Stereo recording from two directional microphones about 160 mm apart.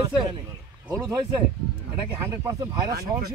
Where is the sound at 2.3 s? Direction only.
20° right (ahead or behind).